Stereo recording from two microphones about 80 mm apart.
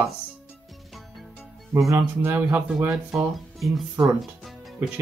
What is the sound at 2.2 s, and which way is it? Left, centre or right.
Speech, right.